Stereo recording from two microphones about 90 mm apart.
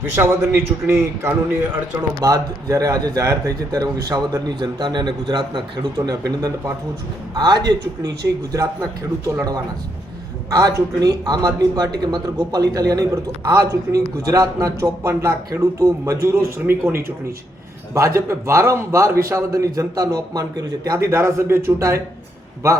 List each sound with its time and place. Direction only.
0.2 s a man's voice: 30° right (ahead or behind)
2.2 s a man's voice: 40° right (ahead or behind); by 5.8 s 60° right (ahead or behind)
6.0 s a man's voice: 45° right (ahead or behind)